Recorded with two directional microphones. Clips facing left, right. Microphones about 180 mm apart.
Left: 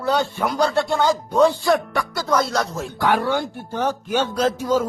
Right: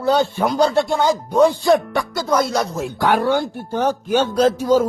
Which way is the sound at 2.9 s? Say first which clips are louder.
Right 3 dB; 35° right (ahead or behind).